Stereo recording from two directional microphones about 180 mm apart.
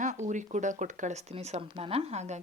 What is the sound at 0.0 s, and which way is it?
Speech, 40° right (ahead or behind).